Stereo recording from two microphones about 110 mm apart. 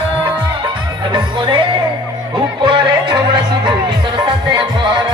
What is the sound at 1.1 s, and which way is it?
Music, 45° right (ahead or behind).